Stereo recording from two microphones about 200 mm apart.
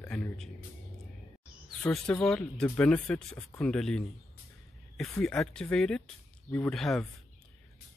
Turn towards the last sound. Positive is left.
turn(degrees=0)  # may be behind; listen again after turning